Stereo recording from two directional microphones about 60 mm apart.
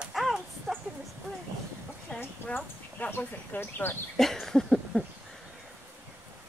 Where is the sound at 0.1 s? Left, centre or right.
Centre.